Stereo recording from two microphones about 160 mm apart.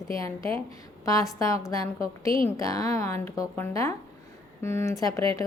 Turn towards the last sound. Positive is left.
turn(degrees=20)  # may be behind; listen again after turning